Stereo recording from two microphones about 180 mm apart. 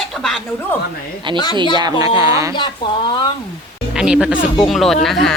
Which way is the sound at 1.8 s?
20° right (ahead or behind).